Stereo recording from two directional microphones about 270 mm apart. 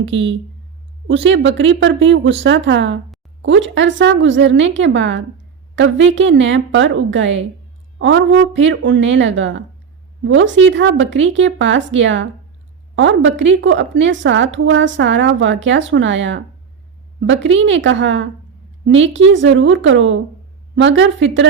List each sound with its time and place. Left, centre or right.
0.0 s a woman's voice: right